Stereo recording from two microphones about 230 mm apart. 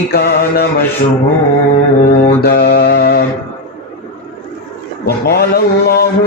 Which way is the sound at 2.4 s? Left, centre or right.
Left.